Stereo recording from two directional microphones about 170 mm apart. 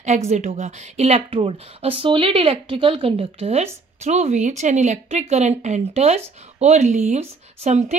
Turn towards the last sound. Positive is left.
turn(degrees=-40)  # may be behind; listen again after turning